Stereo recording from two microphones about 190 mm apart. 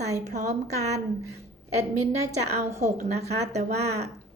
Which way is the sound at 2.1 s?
35° right (ahead or behind).